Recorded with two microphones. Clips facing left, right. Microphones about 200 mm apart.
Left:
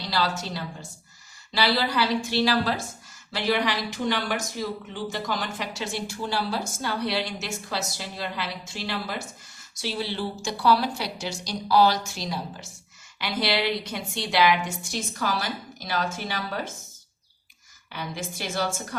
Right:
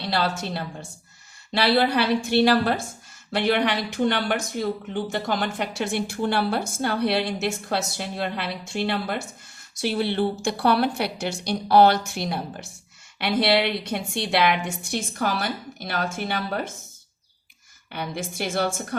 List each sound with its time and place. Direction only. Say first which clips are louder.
0.0 s speech: right 2 dB; 60° right (ahead or behind)
17.9 s speech: right 4 dB; 55° right (ahead or behind)